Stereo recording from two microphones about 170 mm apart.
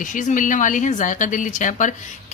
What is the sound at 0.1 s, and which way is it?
A woman's voice, 50° left (ahead or behind).